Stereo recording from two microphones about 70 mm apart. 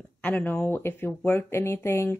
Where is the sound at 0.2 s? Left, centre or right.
Left.